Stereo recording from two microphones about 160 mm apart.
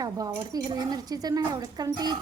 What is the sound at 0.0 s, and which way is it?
Speech, 20° right (ahead or behind).